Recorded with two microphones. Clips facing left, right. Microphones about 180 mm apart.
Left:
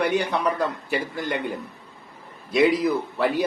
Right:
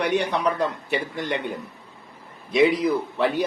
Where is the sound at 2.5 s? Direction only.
5° left (ahead or behind).